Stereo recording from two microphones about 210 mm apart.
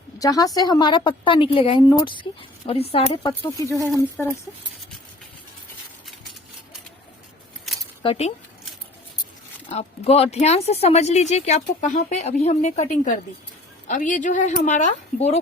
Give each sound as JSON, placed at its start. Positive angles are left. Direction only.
{"t": 0.2, "sound": "a woman's voice", "side_deg": 15}
{"t": 4.2, "sound": "speech", "side_deg": 5}
{"t": 7.7, "sound": "a sound", "side_deg": 0}
{"t": 8.0, "sound": "speech", "side_deg": 30}
{"t": 9.6, "sound": "speech", "side_deg": 30}